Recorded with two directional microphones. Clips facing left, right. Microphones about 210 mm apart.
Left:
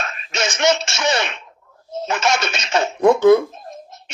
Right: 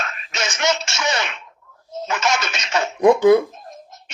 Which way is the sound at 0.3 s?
30° left (ahead or behind).